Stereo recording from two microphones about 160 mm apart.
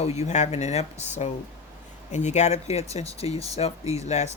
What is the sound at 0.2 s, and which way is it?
Speech, 45° left (ahead or behind).